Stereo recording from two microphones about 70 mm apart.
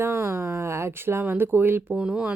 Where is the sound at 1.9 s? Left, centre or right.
Centre.